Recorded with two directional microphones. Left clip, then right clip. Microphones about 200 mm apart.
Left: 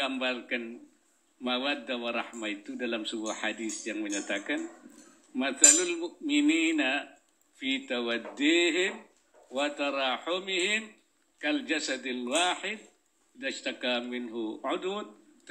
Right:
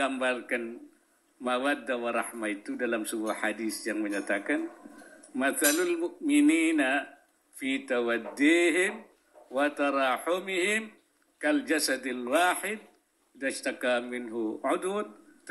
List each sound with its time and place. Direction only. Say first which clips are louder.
0.0 s a man's voice: right 2 dB; 50° right (ahead or behind)